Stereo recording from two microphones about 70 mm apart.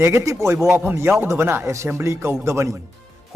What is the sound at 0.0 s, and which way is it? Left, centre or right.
A man's voice, right.